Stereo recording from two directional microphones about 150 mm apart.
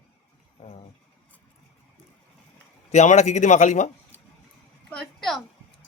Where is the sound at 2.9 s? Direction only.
50° left (ahead or behind).